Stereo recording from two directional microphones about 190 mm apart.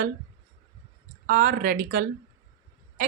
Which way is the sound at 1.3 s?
50° right (ahead or behind).